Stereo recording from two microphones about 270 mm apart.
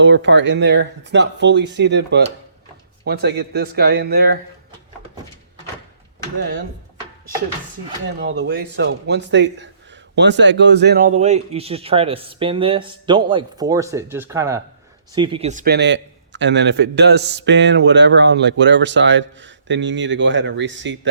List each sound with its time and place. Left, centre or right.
0.0 s a man's voice: right
8.2 s a man's voice: right